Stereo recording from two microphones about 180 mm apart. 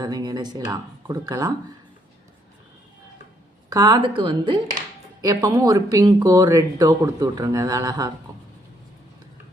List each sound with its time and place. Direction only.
0.0 s speech: 20° right (ahead or behind)
3.7 s speech: 20° right (ahead or behind)